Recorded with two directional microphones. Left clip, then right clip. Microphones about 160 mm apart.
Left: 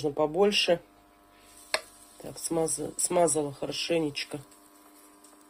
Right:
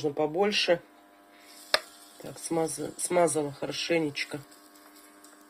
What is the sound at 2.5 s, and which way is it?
Speech, 5° left (ahead or behind).